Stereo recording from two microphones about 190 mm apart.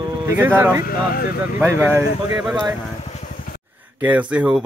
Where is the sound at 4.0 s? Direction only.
5° right (ahead or behind).